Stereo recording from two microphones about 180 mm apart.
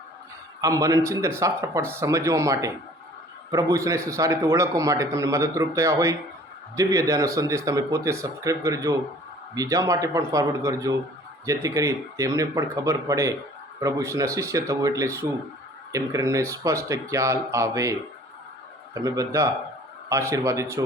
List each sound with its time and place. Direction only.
0.6 s a man's voice: 20° right (ahead or behind)
18.9 s a man's voice: 20° right (ahead or behind)